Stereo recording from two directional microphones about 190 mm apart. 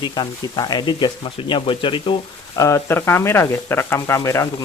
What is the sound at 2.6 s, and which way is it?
Speech, 15° left (ahead or behind).